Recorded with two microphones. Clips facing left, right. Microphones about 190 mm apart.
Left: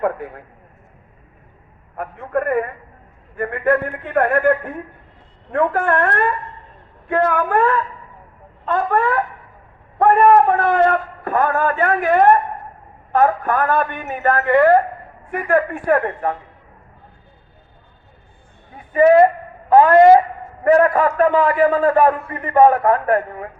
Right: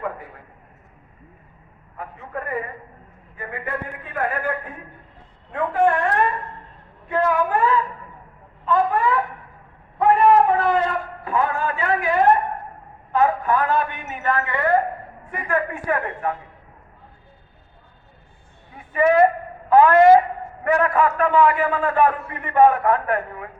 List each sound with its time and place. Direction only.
0.0 s a man's voice: 65° left (ahead or behind)
2.0 s a man's voice: 55° left (ahead or behind)
13.1 s a man's voice: 55° left (ahead or behind)
18.9 s a man's voice: 35° left (ahead or behind)